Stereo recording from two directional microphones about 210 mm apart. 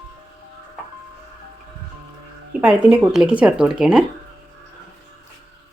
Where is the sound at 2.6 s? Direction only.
5° right (ahead or behind).